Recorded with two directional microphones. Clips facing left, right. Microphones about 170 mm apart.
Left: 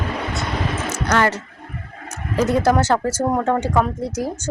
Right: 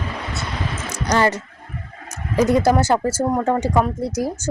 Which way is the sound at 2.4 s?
10° right (ahead or behind).